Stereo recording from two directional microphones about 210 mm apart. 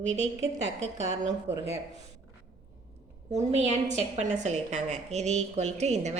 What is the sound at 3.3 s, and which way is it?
A woman's voice, 35° right (ahead or behind).